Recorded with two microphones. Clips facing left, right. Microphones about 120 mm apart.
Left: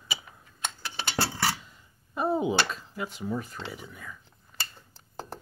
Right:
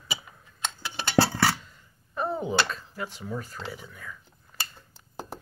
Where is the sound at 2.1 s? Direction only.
5° left (ahead or behind).